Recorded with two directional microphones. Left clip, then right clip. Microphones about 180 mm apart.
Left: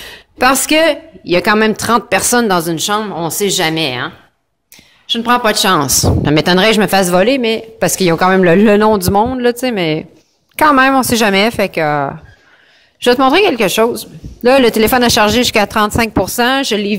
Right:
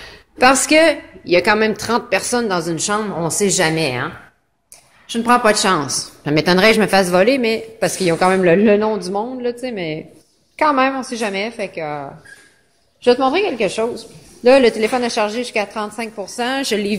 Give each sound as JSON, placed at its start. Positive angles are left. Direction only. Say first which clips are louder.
{"t": 0.0, "sound": "a woman's voice", "louder": "left 1 dB", "side_deg": 25}
{"t": 5.8, "sound": "a woman's voice", "louder": "left 9 dB", "side_deg": 30}
{"t": 7.8, "sound": "speech", "louder": "left 4 dB", "side_deg": 30}